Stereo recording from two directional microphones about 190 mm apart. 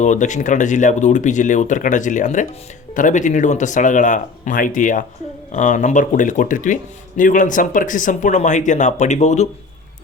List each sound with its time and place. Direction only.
0.0 s speech: 40° left (ahead or behind)